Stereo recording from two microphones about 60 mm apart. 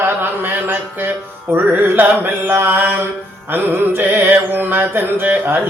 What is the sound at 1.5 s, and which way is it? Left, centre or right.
Carnatic music, right.